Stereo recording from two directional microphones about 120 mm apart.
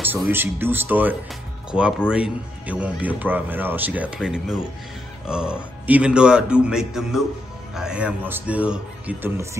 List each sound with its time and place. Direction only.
0.0 s speech: 15° right (ahead or behind)